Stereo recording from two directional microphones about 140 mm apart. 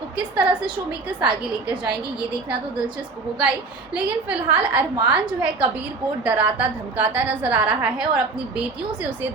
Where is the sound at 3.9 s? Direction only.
10° right (ahead or behind).